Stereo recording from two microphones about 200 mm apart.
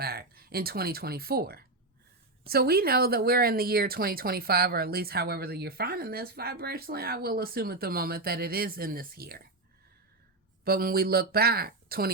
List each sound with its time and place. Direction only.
0.0 s speech: 50° right (ahead or behind)
10.6 s speech: 50° right (ahead or behind)